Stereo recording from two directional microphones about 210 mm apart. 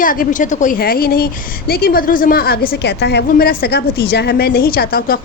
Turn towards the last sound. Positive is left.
turn(degrees=45)  # may be behind; listen again after turning